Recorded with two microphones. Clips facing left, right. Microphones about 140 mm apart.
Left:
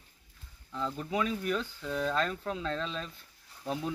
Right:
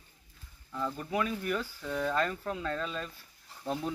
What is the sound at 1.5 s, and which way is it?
Speech, 10° right (ahead or behind).